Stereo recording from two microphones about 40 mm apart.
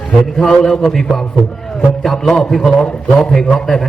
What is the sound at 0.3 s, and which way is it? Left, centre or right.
Speech, centre.